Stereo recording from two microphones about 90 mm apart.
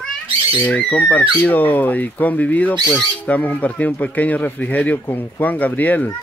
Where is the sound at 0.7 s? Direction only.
15° left (ahead or behind).